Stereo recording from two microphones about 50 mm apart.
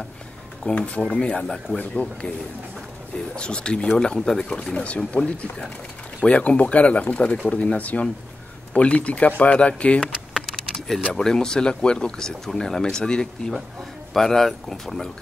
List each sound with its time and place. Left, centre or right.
0.7 s speech: left
1.8 s speech: left
3.3 s speech: centre
10.4 s keys jangling: centre
11.1 s speech: centre